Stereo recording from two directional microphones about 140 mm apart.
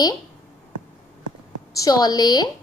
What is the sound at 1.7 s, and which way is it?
Speech, 25° left (ahead or behind).